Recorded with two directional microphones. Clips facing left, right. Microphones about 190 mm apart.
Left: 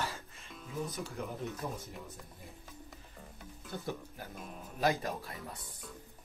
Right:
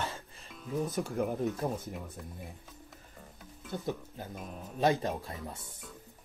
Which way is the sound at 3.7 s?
20° right (ahead or behind).